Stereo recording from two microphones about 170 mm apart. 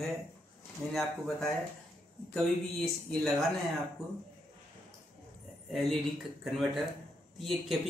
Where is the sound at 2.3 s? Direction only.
Centre (ahead or behind).